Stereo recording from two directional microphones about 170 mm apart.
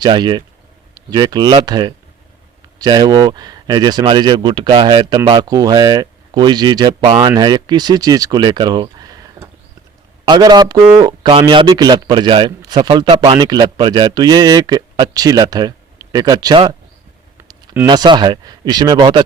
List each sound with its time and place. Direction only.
0.0 s a man's voice: 25° right (ahead or behind)
17.8 s a man's voice: 25° right (ahead or behind)